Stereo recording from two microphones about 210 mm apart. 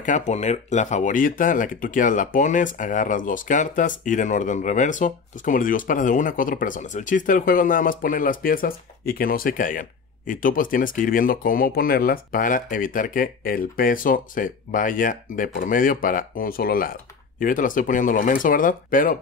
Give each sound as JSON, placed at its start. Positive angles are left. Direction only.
{"t": 0.0, "sound": "speech", "side_deg": 35}